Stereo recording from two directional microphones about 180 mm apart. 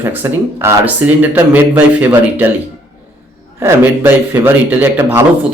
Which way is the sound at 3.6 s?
10° right (ahead or behind).